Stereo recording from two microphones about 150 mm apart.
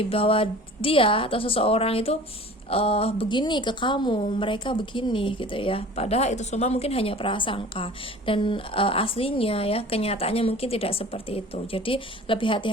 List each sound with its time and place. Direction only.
0.0 s a woman's voice: 40° left (ahead or behind)